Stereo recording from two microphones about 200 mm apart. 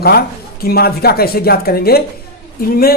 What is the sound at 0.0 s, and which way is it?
Speech, 50° left (ahead or behind).